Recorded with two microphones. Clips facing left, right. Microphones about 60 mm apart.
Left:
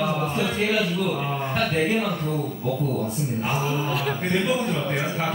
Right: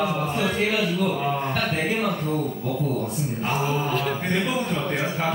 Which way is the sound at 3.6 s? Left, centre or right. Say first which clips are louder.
Right 1 dB; centre.